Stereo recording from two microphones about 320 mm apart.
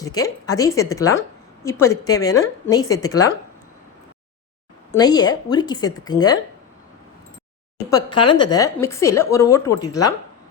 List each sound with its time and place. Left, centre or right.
0.0 s a woman's voice: centre
4.9 s a woman's voice: centre
8.2 s a woman's voice: centre